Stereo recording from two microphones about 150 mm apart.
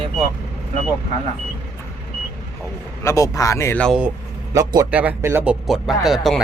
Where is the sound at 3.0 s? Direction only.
20° left (ahead or behind).